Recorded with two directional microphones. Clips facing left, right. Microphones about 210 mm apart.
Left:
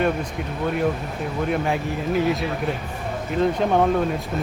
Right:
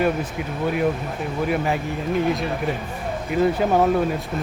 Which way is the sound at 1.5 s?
Centre (ahead or behind).